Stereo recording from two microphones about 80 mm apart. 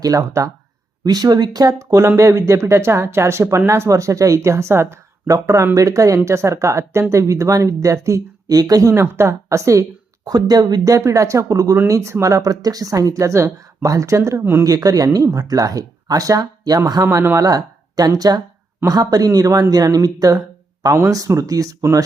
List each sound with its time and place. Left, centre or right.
0.0 s speech: right
10.2 s speech: right